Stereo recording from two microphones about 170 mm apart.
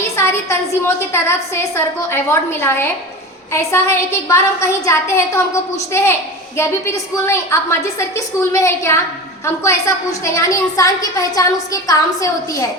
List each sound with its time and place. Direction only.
0.2 s a woman's voice: 15° left (ahead or behind)